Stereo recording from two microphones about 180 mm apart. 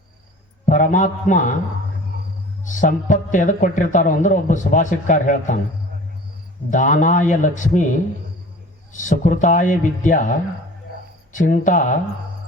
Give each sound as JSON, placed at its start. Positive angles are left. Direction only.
{"t": 0.6, "sound": "a man's voice", "side_deg": 45}
{"t": 2.6, "sound": "a man's voice", "side_deg": 45}
{"t": 6.7, "sound": "a man's voice", "side_deg": 45}